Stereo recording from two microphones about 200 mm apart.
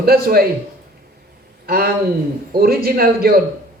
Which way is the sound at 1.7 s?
50° right (ahead or behind).